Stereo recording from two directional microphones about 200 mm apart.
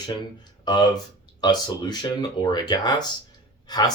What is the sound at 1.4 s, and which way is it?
Speech, 20° left (ahead or behind).